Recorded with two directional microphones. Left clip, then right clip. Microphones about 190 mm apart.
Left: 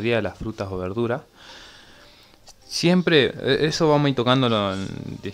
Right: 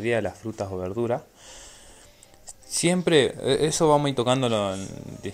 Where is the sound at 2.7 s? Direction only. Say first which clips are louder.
Left 2 dB; 15° left (ahead or behind).